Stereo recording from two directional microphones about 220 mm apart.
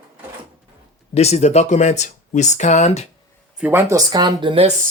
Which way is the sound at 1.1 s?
30° left (ahead or behind).